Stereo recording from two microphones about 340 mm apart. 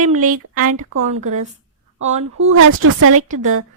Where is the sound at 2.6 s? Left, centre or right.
Right.